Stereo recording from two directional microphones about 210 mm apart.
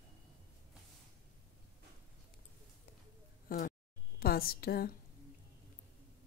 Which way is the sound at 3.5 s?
35° left (ahead or behind).